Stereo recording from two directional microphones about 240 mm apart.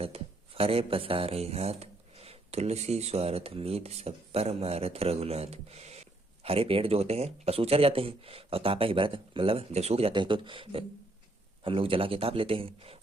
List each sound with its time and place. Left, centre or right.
0.0 s speech: right